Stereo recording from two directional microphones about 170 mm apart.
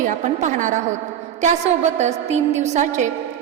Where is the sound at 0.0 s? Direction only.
45° right (ahead or behind).